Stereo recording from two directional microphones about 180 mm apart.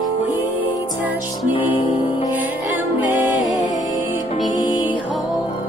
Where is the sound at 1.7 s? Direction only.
30° left (ahead or behind).